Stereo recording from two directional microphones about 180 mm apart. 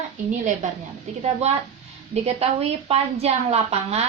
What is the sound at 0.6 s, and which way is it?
A woman's voice, 40° right (ahead or behind).